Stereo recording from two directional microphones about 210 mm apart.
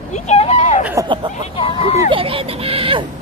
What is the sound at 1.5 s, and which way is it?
Speech, 25° left (ahead or behind).